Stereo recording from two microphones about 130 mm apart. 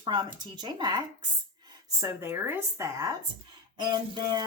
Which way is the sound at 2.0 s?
20° right (ahead or behind).